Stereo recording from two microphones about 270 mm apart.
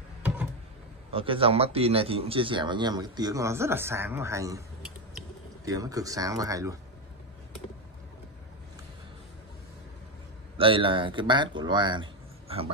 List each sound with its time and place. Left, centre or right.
1.1 s speech: centre
5.7 s speech: centre
10.6 s a man's voice: centre